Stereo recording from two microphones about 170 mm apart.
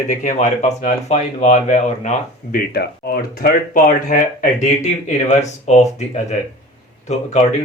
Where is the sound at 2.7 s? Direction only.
65° left (ahead or behind); by 5.8 s 40° left (ahead or behind).